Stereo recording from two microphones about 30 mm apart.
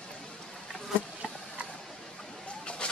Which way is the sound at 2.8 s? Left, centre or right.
Left.